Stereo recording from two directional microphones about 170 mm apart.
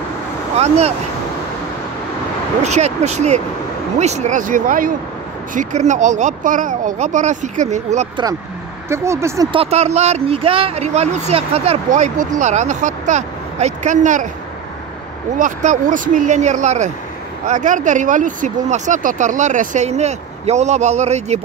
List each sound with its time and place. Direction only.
0.6 s speech: 40° right (ahead or behind)
2.6 s speech: 40° right (ahead or behind)
8.8 s speech: 15° right (ahead or behind)
9.5 s speech: 35° right (ahead or behind)
15.3 s speech: 50° right (ahead or behind)